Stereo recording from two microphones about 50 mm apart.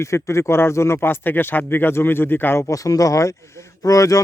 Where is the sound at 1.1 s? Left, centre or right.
Left.